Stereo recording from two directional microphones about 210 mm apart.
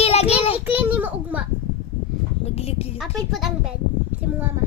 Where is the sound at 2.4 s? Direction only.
30° left (ahead or behind).